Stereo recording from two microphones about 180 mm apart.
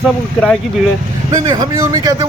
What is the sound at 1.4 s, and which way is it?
Speech, 20° right (ahead or behind).